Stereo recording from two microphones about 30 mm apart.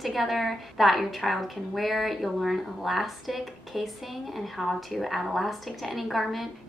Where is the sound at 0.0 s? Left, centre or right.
Centre.